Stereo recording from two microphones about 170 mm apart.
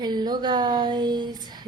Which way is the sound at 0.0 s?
25° right (ahead or behind).